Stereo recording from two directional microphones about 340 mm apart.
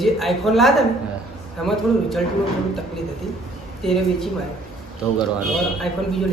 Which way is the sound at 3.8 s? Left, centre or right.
Centre.